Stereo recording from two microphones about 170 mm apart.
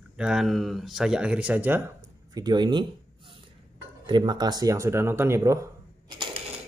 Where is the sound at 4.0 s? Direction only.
25° right (ahead or behind).